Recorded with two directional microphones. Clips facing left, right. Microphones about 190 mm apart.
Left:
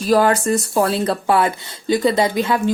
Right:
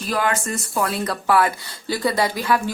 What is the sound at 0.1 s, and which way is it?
A woman's voice, 35° left (ahead or behind).